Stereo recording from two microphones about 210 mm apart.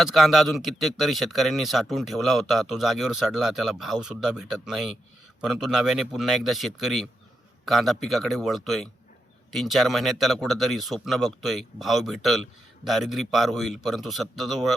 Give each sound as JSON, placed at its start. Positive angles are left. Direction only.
{"t": 0.0, "sound": "speech", "side_deg": 0}